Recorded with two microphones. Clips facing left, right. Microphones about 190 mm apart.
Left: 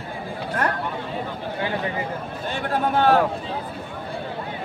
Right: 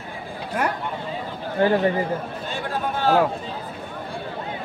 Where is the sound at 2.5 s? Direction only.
60° left (ahead or behind).